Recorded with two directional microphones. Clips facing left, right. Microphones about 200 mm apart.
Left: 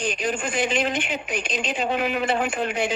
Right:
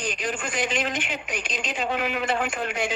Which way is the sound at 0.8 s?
30° left (ahead or behind).